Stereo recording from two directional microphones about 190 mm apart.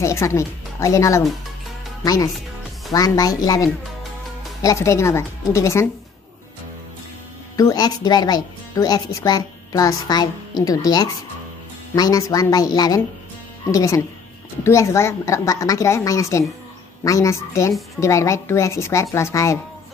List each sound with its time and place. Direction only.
0.0 s a woman's voice: 15° left (ahead or behind)
7.5 s a woman's voice: 20° left (ahead or behind)